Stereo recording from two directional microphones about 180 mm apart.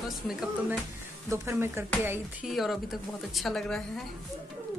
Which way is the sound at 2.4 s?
Centre (ahead or behind).